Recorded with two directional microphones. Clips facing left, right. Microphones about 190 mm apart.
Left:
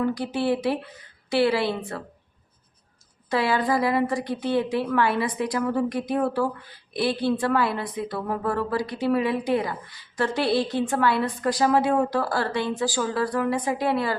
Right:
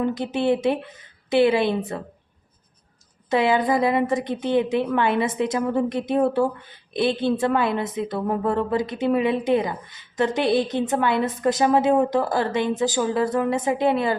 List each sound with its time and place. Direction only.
0.0 s a woman's voice: 20° right (ahead or behind)
3.2 s a woman's voice: 20° right (ahead or behind)